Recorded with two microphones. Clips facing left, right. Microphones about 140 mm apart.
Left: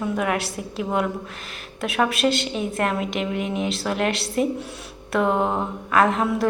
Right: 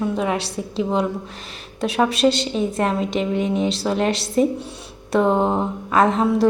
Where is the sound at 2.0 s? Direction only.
35° right (ahead or behind).